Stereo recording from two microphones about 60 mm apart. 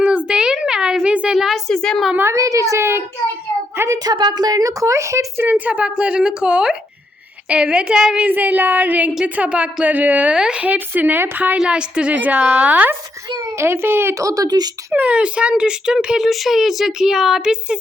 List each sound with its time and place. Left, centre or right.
0.0 s a sound: centre
1.4 s speech: centre
1.6 s a woman's voice: centre
2.3 s speech: right
3.8 s a woman's voice: right
5.5 s a woman's voice: right
8.2 s a woman's voice: right
10.3 s a woman's voice: centre; by 11.5 s right
11.5 s a woman's voice: centre
13.6 s speech: right
14.2 s speech: right
14.9 s speech: centre